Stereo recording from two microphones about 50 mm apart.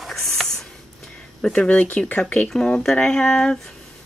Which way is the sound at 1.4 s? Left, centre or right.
Centre.